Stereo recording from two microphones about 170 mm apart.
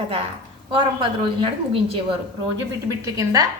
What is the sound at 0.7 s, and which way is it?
Speech, 30° right (ahead or behind).